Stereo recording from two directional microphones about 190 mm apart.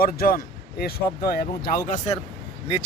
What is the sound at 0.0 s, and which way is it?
Speech, 50° left (ahead or behind).